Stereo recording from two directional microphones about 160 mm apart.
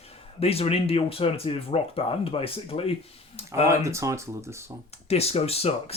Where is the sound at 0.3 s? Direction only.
40° left (ahead or behind).